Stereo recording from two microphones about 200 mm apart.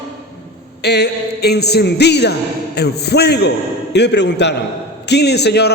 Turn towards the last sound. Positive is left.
turn(degrees=55)  # may be behind; listen again after turning